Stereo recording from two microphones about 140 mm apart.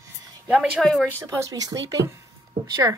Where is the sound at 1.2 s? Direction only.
25° right (ahead or behind).